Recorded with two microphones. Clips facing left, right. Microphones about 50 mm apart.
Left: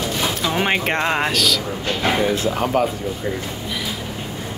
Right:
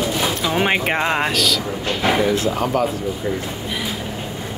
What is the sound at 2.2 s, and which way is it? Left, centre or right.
Speech, centre.